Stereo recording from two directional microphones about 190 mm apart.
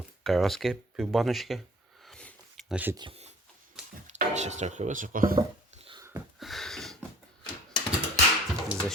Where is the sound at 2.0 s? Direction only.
5° left (ahead or behind).